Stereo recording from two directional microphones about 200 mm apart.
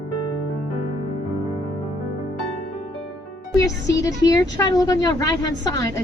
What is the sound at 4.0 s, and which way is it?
A woman's voice, 20° left (ahead or behind).